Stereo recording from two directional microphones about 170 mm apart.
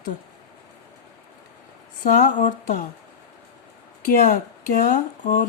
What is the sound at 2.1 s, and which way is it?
Speech, 50° left (ahead or behind).